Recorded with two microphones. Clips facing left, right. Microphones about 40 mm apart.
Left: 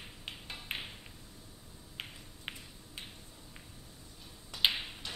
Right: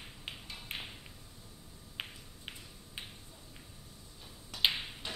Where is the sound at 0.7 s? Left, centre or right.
Left.